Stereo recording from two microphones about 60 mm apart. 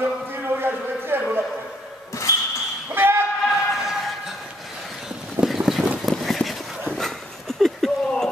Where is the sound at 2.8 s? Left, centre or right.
Right.